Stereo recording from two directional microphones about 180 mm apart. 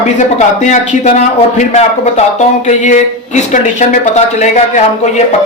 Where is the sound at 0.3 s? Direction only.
40° left (ahead or behind).